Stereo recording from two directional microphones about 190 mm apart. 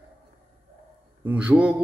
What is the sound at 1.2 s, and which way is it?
Speech, 5° right (ahead or behind).